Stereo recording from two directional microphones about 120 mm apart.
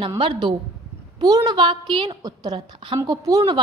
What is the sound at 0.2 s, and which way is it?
A woman's voice, 40° right (ahead or behind).